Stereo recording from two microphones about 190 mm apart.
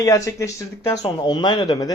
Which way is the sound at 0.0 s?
15° left (ahead or behind).